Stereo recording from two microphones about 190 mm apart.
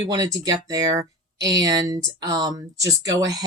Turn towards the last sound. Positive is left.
turn(degrees=-15)  # may be behind; listen again after turning